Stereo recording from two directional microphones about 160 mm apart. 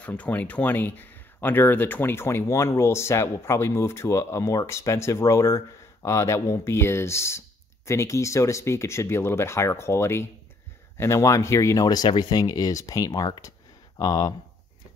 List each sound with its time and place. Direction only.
0.0 s speech: 10° left (ahead or behind)